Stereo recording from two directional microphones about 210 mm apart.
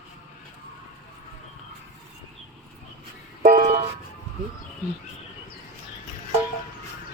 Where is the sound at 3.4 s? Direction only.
40° right (ahead or behind).